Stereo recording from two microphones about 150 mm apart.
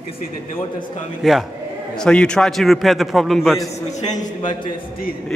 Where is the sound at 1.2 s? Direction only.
Centre (ahead or behind).